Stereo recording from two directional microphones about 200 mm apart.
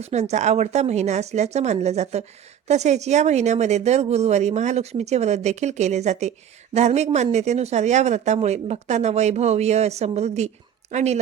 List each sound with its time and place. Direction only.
0.0 s speech: 35° right (ahead or behind)